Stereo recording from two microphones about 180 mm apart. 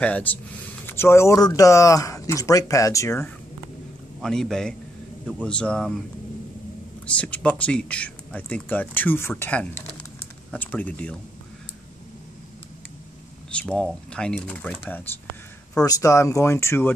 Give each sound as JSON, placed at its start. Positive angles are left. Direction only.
{"t": 0.0, "sound": "speech", "side_deg": 10}
{"t": 4.2, "sound": "speech", "side_deg": 5}
{"t": 7.2, "sound": "speech", "side_deg": 5}
{"t": 13.5, "sound": "speech", "side_deg": 5}